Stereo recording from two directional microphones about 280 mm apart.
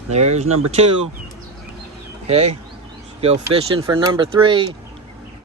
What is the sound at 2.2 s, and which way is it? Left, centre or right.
Speech, right.